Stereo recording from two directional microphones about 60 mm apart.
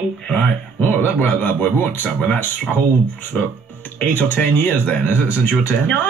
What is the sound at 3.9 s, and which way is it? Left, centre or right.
Speech, left.